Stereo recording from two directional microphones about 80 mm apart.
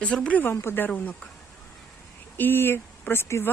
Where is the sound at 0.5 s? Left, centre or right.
Left.